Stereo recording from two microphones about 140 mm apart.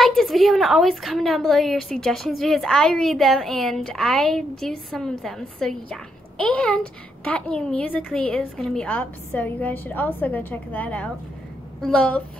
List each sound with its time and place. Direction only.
0.0 s a woman's voice: centre (ahead or behind)